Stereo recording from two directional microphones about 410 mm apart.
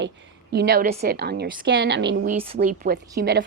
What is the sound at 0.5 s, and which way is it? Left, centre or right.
A woman's voice, right.